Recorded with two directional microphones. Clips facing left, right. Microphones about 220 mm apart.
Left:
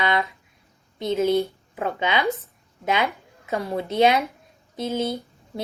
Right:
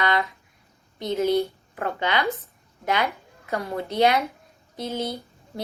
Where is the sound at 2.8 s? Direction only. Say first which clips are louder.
Left 1 dB; 20° left (ahead or behind).